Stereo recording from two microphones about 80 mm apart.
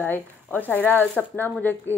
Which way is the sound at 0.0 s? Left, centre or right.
Left.